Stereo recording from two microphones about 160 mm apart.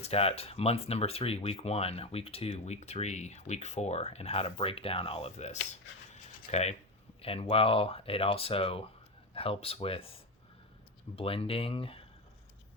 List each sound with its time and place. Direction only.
0.0 s speech: 40° left (ahead or behind)
11.2 s speech: 35° left (ahead or behind)